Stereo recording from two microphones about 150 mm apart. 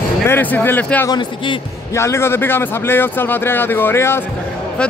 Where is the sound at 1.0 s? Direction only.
30° left (ahead or behind).